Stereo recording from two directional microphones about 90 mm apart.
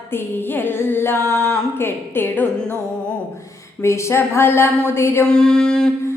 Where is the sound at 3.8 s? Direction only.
30° left (ahead or behind).